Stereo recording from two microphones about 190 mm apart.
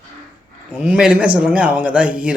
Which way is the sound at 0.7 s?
5° right (ahead or behind).